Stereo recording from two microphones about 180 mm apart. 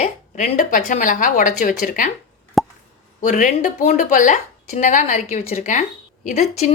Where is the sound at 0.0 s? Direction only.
45° left (ahead or behind).